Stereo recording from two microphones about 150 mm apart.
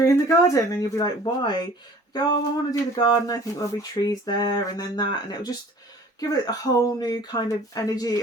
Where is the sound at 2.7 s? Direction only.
25° left (ahead or behind).